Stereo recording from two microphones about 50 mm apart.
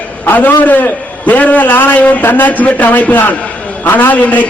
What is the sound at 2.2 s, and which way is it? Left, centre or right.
Speech, left.